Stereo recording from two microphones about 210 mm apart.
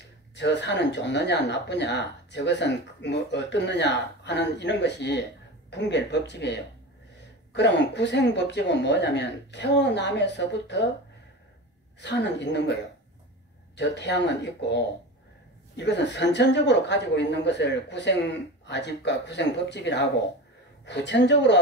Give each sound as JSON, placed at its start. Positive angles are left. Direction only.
{"t": 0.4, "sound": "speech", "side_deg": 55}
{"t": 12.0, "sound": "speech", "side_deg": 55}
{"t": 13.7, "sound": "speech", "side_deg": 55}